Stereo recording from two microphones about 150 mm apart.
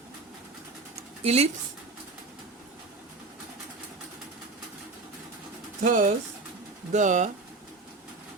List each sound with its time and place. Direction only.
1.2 s speech: 45° right (ahead or behind)
5.8 s speech: 60° right (ahead or behind)